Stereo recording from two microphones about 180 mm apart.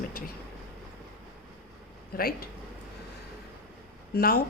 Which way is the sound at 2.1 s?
55° left (ahead or behind).